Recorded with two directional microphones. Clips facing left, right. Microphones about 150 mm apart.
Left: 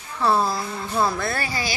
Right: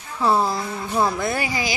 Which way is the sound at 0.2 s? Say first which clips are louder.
Right 1 dB; 15° right (ahead or behind).